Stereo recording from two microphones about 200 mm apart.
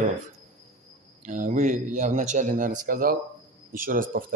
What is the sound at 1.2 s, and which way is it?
Speech, 40° right (ahead or behind).